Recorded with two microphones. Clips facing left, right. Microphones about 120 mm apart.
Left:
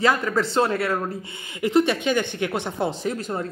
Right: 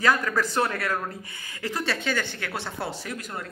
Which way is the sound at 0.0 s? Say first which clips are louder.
Left 3 dB; 20° left (ahead or behind).